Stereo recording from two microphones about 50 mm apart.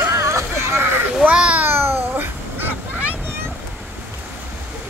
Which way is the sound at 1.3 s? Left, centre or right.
Right.